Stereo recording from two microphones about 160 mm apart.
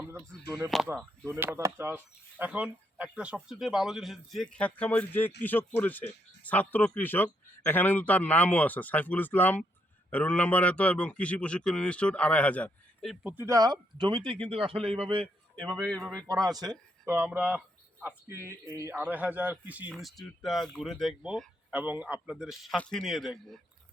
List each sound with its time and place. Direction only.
0.7 s speech: centre (ahead or behind)
1.3 s speech: 15° right (ahead or behind); by 13.3 s centre (ahead or behind)
13.3 s a man's voice: 20° right (ahead or behind); by 15.6 s 35° right (ahead or behind)
15.6 s speech: 5° left (ahead or behind)
16.2 s speech: 20° right (ahead or behind); by 23.6 s centre (ahead or behind)